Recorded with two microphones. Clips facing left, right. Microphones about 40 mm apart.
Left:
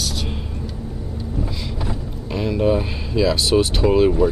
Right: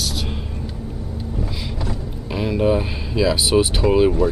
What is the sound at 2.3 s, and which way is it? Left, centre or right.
Speech, centre.